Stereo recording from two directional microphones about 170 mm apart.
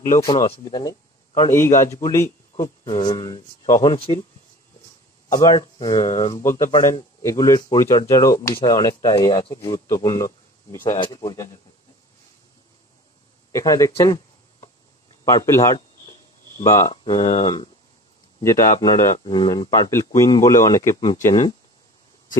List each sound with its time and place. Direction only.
0.2 s speech: 20° left (ahead or behind)
5.3 s speech: 20° left (ahead or behind)
13.5 s speech: 20° left (ahead or behind)
16.9 s speech: 30° left (ahead or behind)
19.1 s speech: 30° left (ahead or behind)